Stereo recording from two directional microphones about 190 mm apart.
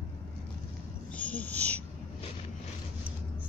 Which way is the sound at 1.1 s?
5° left (ahead or behind).